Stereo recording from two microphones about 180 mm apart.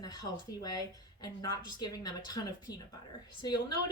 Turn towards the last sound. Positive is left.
turn(degrees=25)  # may be behind; listen again after turning